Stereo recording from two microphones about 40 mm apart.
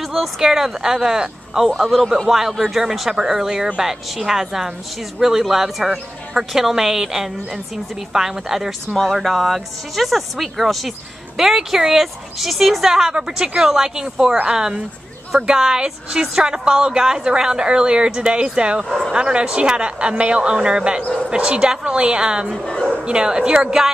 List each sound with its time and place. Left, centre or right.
0.0 s a sound: centre
0.4 s speech: centre
1.8 s speech: centre
2.2 s speech: centre
8.9 s a woman's voice: centre